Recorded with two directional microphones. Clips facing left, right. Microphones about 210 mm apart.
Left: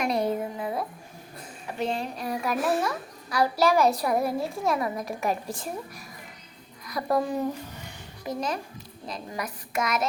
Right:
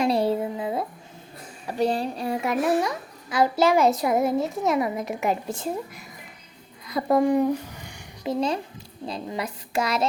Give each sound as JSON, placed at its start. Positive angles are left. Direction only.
{"t": 0.0, "sound": "a sound", "side_deg": -30}
{"t": 1.6, "sound": "a child's voice", "side_deg": -35}
{"t": 8.2, "sound": "speech", "side_deg": -30}